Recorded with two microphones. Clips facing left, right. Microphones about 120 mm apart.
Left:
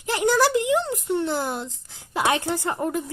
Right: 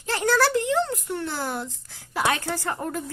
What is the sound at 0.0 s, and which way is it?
Speech, 15° left (ahead or behind).